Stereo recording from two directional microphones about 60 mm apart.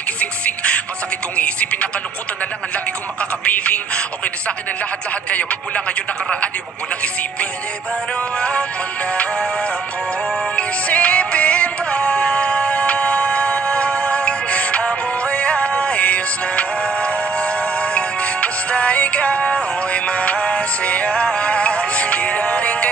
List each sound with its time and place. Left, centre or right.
0.2 s music: left
2.7 s a sound: left
5.3 s speech: left
8.4 s music: centre